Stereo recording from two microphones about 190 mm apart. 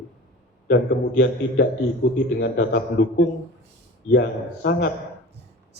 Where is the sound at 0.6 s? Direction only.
65° left (ahead or behind).